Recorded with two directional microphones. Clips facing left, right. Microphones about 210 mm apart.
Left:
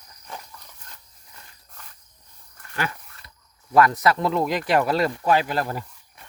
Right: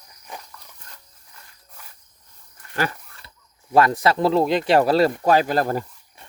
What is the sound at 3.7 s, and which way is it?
Speech, 30° right (ahead or behind).